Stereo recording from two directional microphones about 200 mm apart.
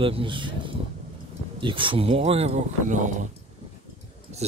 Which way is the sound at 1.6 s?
25° right (ahead or behind).